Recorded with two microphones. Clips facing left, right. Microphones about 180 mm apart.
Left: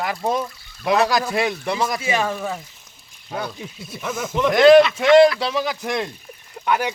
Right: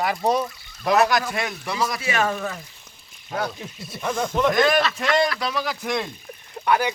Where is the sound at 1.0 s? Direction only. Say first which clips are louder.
Left 2 dB; 35° left (ahead or behind).